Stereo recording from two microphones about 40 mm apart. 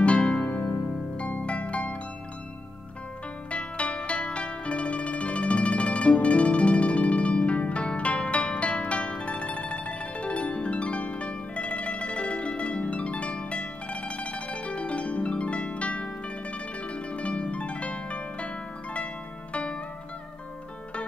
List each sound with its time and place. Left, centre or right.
0.0 s harp: left
0.5 s music: left
1.1 s music: left
3.5 s music: left
19.5 s zither: left